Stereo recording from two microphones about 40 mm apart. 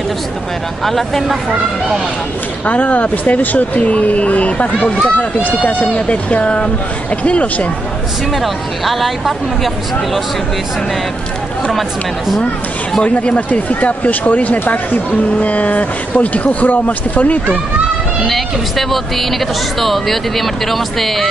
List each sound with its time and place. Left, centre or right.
0.8 s speech: centre
1.3 s speech: centre
2.6 s speech: left
5.4 s speech: left
8.4 s speech: centre
13.0 s speech: left
18.2 s speech: centre